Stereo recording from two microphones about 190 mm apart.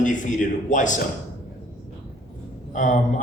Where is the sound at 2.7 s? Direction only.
40° left (ahead or behind).